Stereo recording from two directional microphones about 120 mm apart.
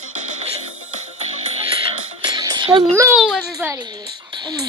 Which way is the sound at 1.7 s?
45° right (ahead or behind).